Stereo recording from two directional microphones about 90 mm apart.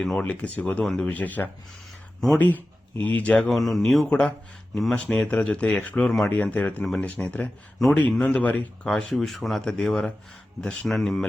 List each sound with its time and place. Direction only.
0.0 s speech: 5° left (ahead or behind)
0.3 s speech: 15° left (ahead or behind)
3.5 s speech: centre (ahead or behind)